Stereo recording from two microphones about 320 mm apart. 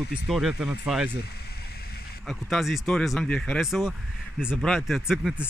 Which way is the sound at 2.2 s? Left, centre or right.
Centre.